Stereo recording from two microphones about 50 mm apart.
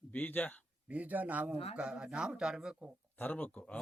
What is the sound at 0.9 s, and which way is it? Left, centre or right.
Speech, right.